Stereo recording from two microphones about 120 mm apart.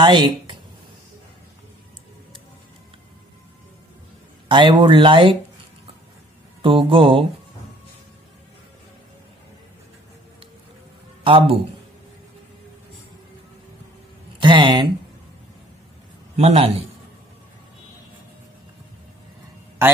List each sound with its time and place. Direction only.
0.0 s speech: 40° right (ahead or behind)
4.5 s speech: 40° right (ahead or behind)
6.6 s speech: 50° right (ahead or behind)
11.2 s speech: 50° right (ahead or behind)
14.4 s speech: 40° right (ahead or behind)
16.3 s a man's voice: 60° right (ahead or behind)